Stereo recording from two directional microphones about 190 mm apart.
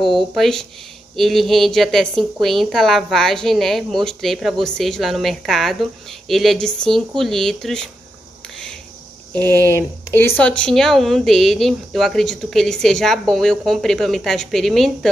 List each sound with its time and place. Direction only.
0.0 s speech: centre (ahead or behind)
9.3 s speech: 10° left (ahead or behind)